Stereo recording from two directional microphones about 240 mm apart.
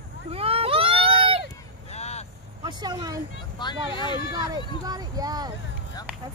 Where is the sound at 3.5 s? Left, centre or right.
Centre.